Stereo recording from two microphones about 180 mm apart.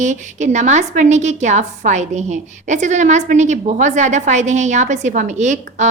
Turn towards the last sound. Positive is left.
turn(degrees=-40)  # may be behind; listen again after turning